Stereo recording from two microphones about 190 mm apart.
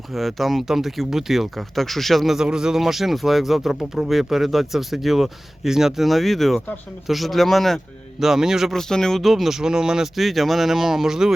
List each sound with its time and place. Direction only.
0.1 s speech: centre (ahead or behind)